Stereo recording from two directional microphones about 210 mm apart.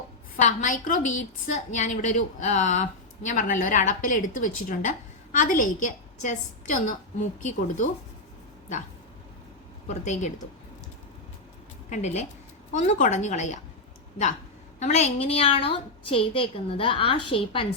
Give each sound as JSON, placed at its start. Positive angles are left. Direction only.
{"t": 0.3, "sound": "a woman's voice", "side_deg": 35}
{"t": 10.0, "sound": "a woman's voice", "side_deg": 35}
{"t": 11.9, "sound": "a woman's voice", "side_deg": 35}
{"t": 14.8, "sound": "a woman's voice", "side_deg": 30}